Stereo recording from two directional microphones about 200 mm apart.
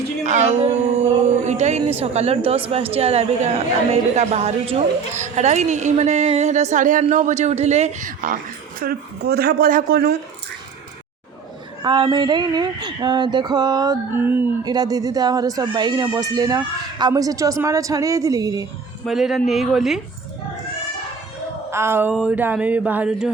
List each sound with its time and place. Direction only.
0.3 s a sound: 35° right (ahead or behind)
2.6 s a woman's voice: 30° right (ahead or behind); by 10.2 s 50° right (ahead or behind)
11.8 s speech: 20° right (ahead or behind)
19.0 s speech: centre (ahead or behind)
21.7 s speech: 10° right (ahead or behind)